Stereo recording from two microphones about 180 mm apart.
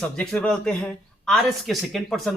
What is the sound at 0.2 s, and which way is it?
Speech, 5° left (ahead or behind).